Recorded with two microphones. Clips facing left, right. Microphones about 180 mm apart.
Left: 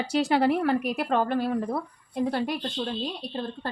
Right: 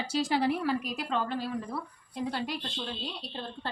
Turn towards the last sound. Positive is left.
turn(degrees=45)  # may be behind; listen again after turning